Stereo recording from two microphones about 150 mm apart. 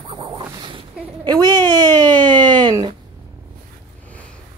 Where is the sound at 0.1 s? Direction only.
35° right (ahead or behind).